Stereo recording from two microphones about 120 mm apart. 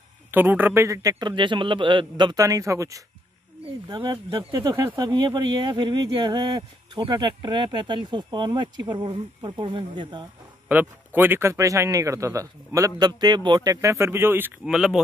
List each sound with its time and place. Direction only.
0.3 s speech: 15° right (ahead or behind)
1.3 s a man's voice: 40° right (ahead or behind)
2.3 s speech: 30° right (ahead or behind)
3.9 s speech: 40° right (ahead or behind)
10.7 s speech: 15° right (ahead or behind)
14.6 s speech: 5° right (ahead or behind)